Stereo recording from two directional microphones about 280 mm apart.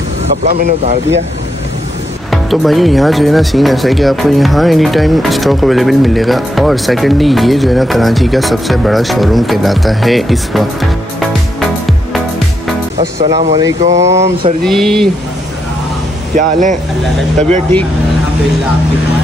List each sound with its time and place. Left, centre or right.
0.5 s speech: right
2.3 s speech: centre
13.4 s speech: centre
13.8 s speech: right
14.1 s speech: centre
14.6 s speech: centre
16.3 s speech: right